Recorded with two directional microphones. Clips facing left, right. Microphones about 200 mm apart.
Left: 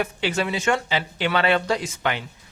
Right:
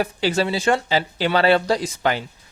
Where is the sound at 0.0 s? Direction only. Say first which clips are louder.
Right 4 dB; 35° right (ahead or behind).